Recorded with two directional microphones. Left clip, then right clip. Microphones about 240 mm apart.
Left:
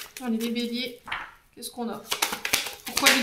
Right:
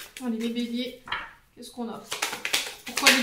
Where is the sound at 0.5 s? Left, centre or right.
Left.